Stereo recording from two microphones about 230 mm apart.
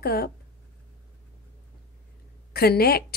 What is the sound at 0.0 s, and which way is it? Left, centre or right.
Speech, left.